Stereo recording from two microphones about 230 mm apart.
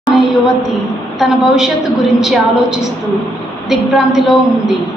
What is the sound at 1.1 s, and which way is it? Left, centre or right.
A woman's voice, centre.